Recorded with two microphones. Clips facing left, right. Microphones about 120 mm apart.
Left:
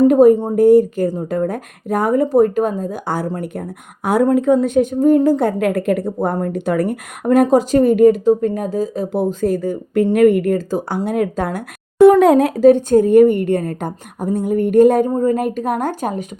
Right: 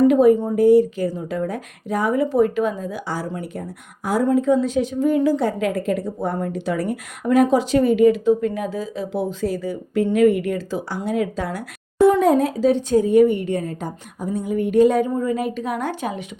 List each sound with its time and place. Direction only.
0.1 s speech: 45° left (ahead or behind)
12.2 s speech: 70° left (ahead or behind); by 16.2 s 45° left (ahead or behind)